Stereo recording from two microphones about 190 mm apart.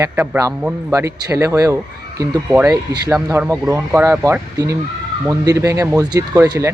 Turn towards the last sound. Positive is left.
turn(degrees=-15)  # may be behind; listen again after turning